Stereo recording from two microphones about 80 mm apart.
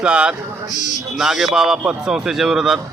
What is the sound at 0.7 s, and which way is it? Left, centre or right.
Speech, left.